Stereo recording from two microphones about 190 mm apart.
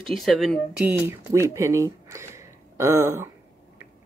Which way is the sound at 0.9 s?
15° right (ahead or behind).